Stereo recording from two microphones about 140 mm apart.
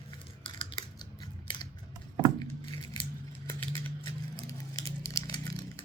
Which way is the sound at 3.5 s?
20° left (ahead or behind).